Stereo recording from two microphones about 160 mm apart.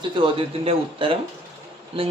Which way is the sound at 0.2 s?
35° right (ahead or behind).